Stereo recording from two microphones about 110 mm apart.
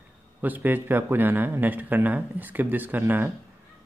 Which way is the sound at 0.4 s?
15° right (ahead or behind).